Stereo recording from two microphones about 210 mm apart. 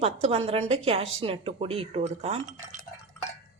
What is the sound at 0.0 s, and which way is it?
A woman's voice, 30° right (ahead or behind).